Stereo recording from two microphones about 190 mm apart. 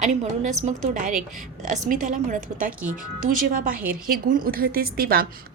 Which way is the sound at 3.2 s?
45° right (ahead or behind).